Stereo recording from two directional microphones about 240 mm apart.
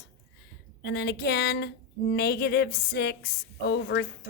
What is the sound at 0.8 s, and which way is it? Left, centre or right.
A woman's voice, left.